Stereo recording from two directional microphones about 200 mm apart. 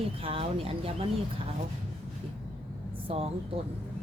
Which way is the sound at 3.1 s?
30° right (ahead or behind).